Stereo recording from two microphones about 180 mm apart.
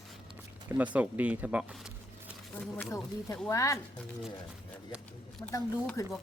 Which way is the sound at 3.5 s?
15° left (ahead or behind).